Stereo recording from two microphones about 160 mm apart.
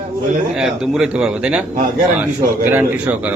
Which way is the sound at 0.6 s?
5° right (ahead or behind).